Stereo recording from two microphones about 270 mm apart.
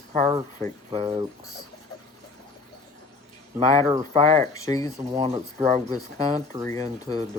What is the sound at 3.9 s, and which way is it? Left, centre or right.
Speech, right.